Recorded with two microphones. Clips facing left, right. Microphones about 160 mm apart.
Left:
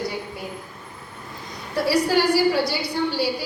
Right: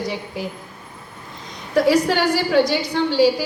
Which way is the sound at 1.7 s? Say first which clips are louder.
Right 4 dB; 80° right.